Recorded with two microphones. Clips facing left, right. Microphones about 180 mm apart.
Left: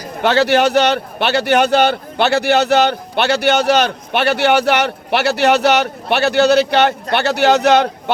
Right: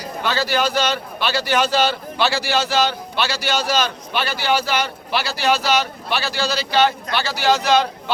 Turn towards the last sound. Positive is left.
turn(degrees=65)  # may be behind; listen again after turning